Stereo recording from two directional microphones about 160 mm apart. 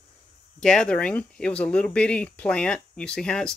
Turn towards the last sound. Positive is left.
turn(degrees=5)  # may be behind; listen again after turning